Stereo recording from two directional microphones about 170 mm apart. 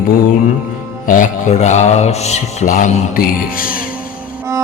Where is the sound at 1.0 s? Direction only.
50° left (ahead or behind).